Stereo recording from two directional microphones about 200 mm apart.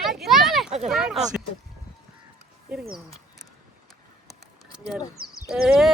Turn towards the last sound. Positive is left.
turn(degrees=0)  # may be behind; listen again after turning